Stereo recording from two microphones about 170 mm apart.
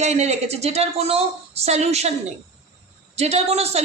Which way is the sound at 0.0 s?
40° right (ahead or behind).